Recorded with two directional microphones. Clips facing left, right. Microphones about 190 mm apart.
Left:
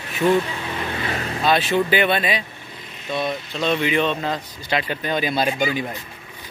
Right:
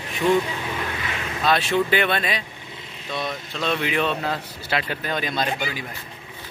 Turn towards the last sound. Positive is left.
turn(degrees=20)  # may be behind; listen again after turning